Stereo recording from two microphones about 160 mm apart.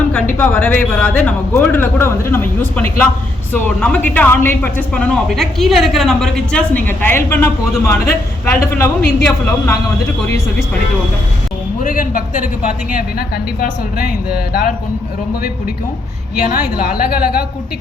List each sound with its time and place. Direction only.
0.3 s speech: 10° left (ahead or behind)
11.8 s a woman's voice: 55° left (ahead or behind)